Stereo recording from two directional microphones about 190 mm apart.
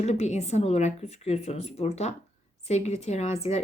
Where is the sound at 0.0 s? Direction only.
35° left (ahead or behind).